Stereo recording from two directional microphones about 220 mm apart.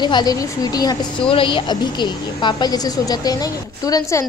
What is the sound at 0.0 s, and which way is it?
A woman's voice, 20° left (ahead or behind).